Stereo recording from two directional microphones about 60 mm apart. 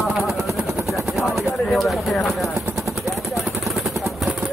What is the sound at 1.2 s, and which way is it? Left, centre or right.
Chopping, centre.